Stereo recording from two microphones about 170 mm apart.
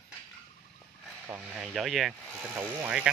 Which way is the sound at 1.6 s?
Centre (ahead or behind).